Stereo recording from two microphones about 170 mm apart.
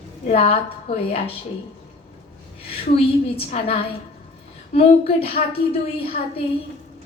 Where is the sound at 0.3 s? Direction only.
35° left (ahead or behind).